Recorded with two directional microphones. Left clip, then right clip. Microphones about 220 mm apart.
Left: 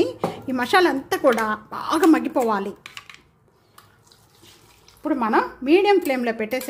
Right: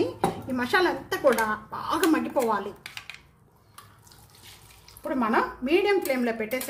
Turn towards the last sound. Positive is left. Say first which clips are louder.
# left 4 dB
turn(degrees=40)  # may be behind; listen again after turning